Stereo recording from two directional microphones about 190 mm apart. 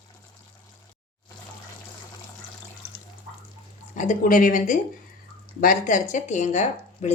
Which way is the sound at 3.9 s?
45° left (ahead or behind).